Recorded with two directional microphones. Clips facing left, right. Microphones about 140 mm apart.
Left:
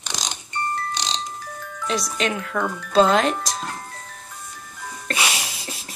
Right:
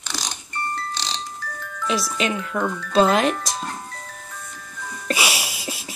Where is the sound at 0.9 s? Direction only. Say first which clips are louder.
Left 2 dB; 20° left (ahead or behind).